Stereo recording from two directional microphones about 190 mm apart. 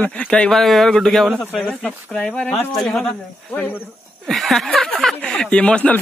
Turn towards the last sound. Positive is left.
turn(degrees=5)  # may be behind; listen again after turning